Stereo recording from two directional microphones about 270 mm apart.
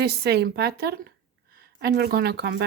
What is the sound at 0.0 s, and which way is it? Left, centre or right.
A woman's voice, right.